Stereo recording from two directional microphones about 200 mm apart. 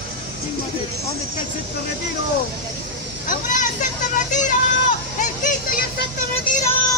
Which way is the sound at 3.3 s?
40° left (ahead or behind).